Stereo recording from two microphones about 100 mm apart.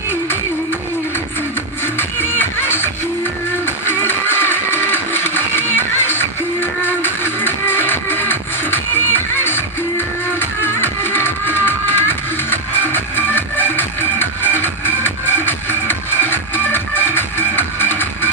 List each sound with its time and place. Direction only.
2.0 s music: 20° left (ahead or behind)